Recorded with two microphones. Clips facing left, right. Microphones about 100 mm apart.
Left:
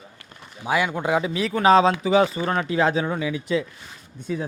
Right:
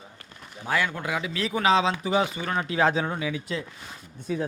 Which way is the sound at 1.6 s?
45° left (ahead or behind).